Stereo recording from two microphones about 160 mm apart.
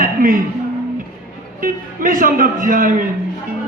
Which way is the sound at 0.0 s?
60° right (ahead or behind).